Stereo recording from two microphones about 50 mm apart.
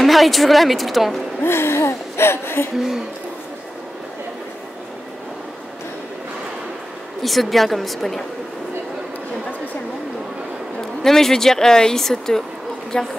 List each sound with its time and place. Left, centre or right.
0.0 s a woman's voice: centre
1.4 s gasp: left
7.2 s a woman's voice: centre
11.0 s speech: centre